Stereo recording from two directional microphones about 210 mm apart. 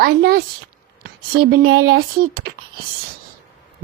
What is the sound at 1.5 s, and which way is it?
Speech, 45° right (ahead or behind).